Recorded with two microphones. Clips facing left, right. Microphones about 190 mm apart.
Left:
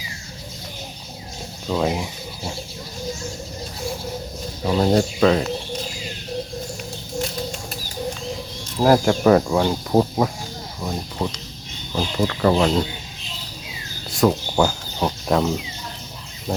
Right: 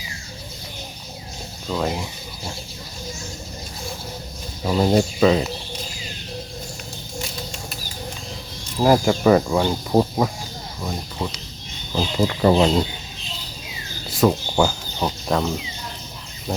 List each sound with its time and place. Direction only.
1.6 s speech: 5° left (ahead or behind)
4.6 s speech: centre (ahead or behind)
8.8 s speech: centre (ahead or behind)
11.9 s speech: 15° right (ahead or behind)
14.1 s speech: centre (ahead or behind)